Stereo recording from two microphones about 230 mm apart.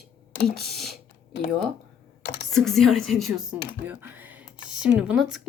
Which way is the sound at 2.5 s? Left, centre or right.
Centre.